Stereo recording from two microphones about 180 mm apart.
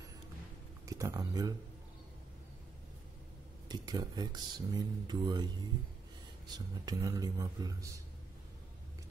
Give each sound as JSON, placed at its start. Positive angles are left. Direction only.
{"t": 0.8, "sound": "speech", "side_deg": -15}
{"t": 3.6, "sound": "speech", "side_deg": -25}
{"t": 6.5, "sound": "speech", "side_deg": -20}